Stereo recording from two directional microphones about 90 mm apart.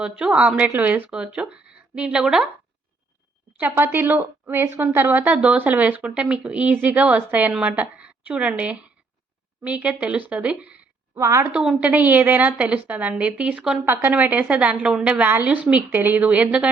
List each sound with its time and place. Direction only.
0.0 s a woman's voice: 10° right (ahead or behind)
3.6 s a woman's voice: 25° right (ahead or behind)
11.1 s a woman's voice: 35° right (ahead or behind)
11.5 s a woman's voice: 10° right (ahead or behind)
13.8 s a woman's voice: 25° right (ahead or behind)